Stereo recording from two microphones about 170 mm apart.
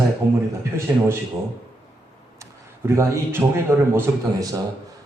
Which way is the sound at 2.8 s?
15° right (ahead or behind).